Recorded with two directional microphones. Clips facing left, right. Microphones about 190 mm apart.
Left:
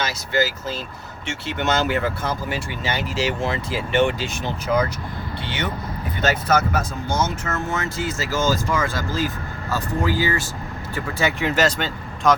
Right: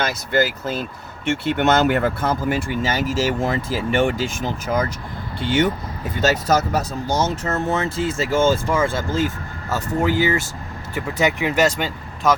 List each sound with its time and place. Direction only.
0.0 s speech: 55° right (ahead or behind)
6.3 s speech: 40° right (ahead or behind); by 12.3 s 10° right (ahead or behind)